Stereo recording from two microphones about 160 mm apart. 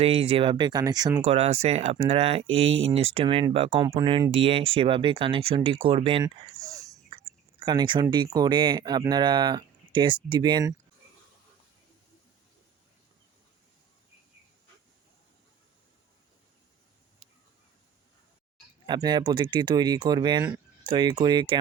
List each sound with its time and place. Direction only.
0.0 s speech: 35° right (ahead or behind)
1.2 s speech: 40° right (ahead or behind)
6.2 s a sound: 20° right (ahead or behind)
8.1 s speech: 25° right (ahead or behind)
18.9 s speech: 25° right (ahead or behind)